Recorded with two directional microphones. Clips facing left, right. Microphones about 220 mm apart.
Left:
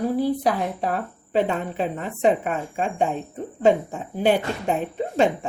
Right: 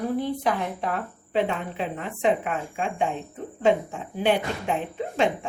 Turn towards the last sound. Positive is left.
turn(degrees=40)  # may be behind; listen again after turning